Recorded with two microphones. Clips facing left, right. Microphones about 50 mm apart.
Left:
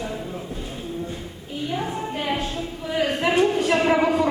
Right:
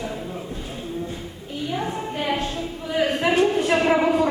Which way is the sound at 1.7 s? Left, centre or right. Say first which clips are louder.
Even; centre.